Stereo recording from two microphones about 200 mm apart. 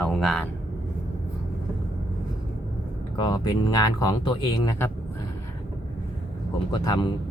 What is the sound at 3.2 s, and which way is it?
Speech, 20° left (ahead or behind).